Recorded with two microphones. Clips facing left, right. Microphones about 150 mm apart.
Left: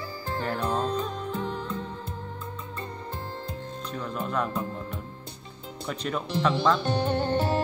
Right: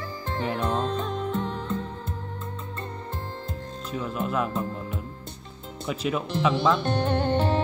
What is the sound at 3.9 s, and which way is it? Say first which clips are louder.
Music: right 3 dB; 5° right (ahead or behind).